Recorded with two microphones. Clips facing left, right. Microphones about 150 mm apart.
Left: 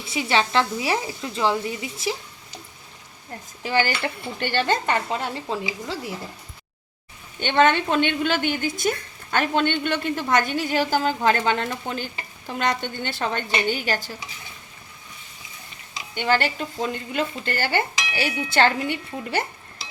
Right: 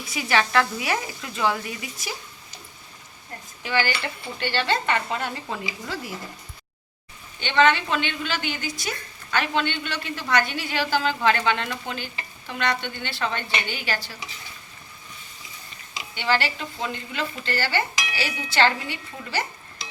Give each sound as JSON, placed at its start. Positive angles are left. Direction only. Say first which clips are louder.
{"t": 0.0, "sound": "speech", "louder": "left 1 dB", "side_deg": 25}
{"t": 3.6, "sound": "speech", "louder": "left 2 dB", "side_deg": 40}
{"t": 7.3, "sound": "a woman's voice", "louder": "left 1 dB", "side_deg": 50}
{"t": 16.1, "sound": "a woman's voice", "louder": "left 2 dB", "side_deg": 50}